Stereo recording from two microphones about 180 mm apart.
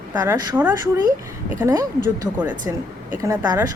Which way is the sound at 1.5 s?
15° right (ahead or behind).